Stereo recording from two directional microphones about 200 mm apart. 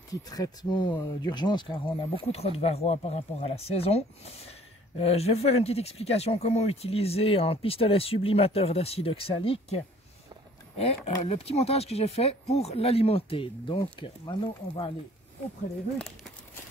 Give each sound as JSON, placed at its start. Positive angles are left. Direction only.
{"t": 0.1, "sound": "speech", "side_deg": 20}
{"t": 10.8, "sound": "speech", "side_deg": 30}